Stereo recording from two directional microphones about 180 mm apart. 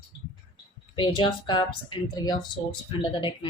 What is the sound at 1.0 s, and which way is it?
A woman's voice, 25° left (ahead or behind).